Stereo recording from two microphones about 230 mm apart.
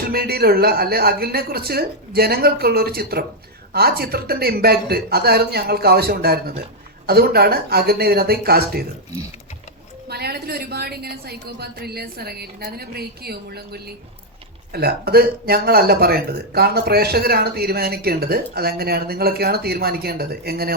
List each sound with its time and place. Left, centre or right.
0.1 s speech: right
10.1 s speech: right